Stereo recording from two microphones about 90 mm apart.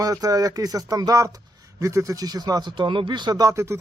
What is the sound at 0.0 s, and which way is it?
Speech, 40° right (ahead or behind).